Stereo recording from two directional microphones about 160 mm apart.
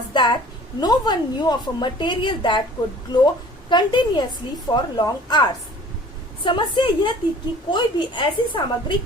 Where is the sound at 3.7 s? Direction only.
25° left (ahead or behind).